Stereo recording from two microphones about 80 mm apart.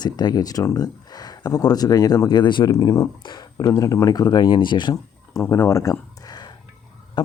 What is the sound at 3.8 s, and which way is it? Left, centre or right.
Speech, left.